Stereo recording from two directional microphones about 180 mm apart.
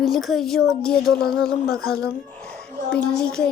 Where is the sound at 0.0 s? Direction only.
Centre (ahead or behind).